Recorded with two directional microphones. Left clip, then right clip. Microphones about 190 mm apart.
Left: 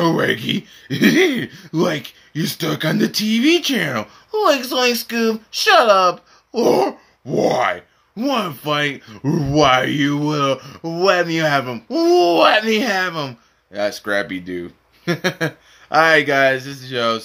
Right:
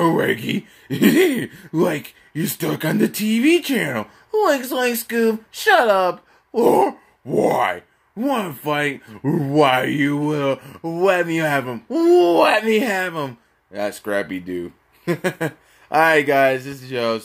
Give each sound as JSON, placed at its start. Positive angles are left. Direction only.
{"t": 0.0, "sound": "speech", "side_deg": 15}